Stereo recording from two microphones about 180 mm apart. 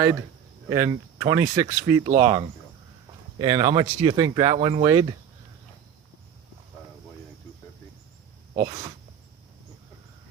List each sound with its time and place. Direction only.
0.7 s speech: 20° right (ahead or behind)
4.4 s speech: 40° right (ahead or behind)
4.6 s speech: 25° right (ahead or behind)
8.5 s speech: 25° right (ahead or behind)